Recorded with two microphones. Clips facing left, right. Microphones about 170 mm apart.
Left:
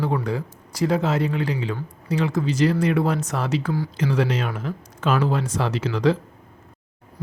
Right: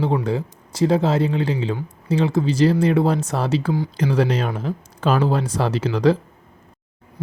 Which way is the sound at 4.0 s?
35° right (ahead or behind).